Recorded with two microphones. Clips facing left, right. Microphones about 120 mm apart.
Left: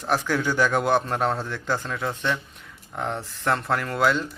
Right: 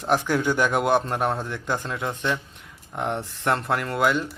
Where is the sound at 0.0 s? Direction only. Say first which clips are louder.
Right 2 dB; 20° right (ahead or behind).